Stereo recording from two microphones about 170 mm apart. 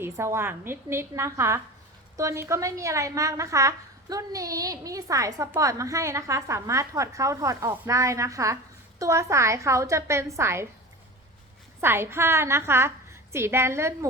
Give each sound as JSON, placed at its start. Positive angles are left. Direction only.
{"t": 0.0, "sound": "a woman's voice", "side_deg": -15}
{"t": 11.8, "sound": "a woman's voice", "side_deg": -15}